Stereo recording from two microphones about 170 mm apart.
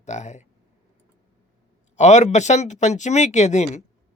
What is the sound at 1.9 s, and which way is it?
Speech, 40° left (ahead or behind).